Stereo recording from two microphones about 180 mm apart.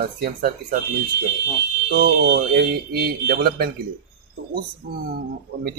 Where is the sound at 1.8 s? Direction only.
60° right (ahead or behind).